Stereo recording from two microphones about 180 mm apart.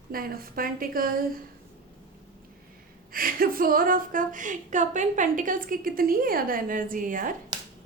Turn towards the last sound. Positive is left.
turn(degrees=-50)  # may be behind; listen again after turning